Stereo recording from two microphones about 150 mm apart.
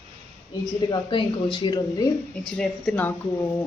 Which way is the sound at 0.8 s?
35° left (ahead or behind).